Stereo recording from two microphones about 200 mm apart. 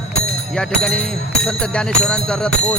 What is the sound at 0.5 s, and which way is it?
Speech, 5° left (ahead or behind).